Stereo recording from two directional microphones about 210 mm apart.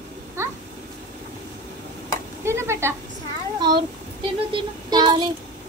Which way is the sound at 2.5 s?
10° right (ahead or behind).